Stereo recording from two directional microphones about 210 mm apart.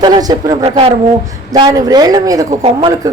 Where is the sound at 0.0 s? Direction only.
20° right (ahead or behind).